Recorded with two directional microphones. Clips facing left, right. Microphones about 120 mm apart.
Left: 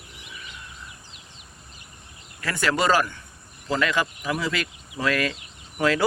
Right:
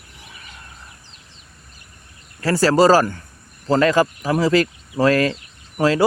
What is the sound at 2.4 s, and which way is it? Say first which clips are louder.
Speech: right 9 dB; 35° right (ahead or behind).